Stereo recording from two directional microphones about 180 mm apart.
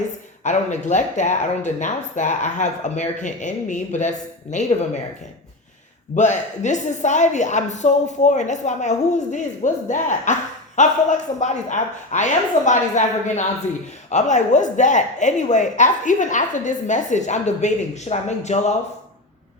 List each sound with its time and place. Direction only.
0.4 s a woman's voice: 40° left (ahead or behind)
6.1 s a woman's voice: 40° left (ahead or behind)